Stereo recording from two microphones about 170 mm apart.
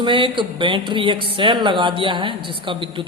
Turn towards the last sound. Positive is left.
turn(degrees=-30)  # may be behind; listen again after turning